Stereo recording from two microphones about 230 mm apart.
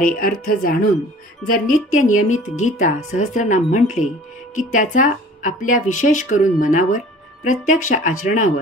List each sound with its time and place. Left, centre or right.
0.0 s speech: left